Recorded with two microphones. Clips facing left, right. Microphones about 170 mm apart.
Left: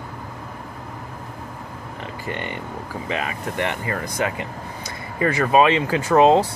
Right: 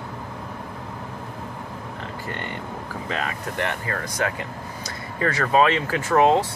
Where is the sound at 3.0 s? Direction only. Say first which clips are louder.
Left 2 dB; 10° left (ahead or behind); by 6.5 s 30° left (ahead or behind).